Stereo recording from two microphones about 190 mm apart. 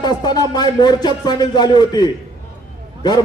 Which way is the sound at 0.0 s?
20° left (ahead or behind).